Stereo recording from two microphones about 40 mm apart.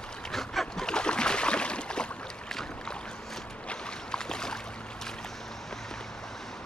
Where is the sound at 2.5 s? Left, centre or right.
Centre.